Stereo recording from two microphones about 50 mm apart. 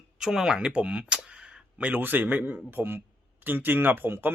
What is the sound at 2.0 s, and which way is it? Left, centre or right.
Speech, right.